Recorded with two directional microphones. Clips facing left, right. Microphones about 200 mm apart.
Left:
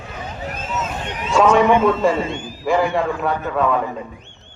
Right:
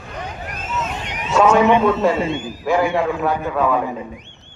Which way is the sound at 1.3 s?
5° right (ahead or behind).